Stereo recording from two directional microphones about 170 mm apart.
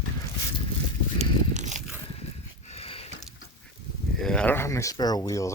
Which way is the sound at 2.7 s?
35° left (ahead or behind).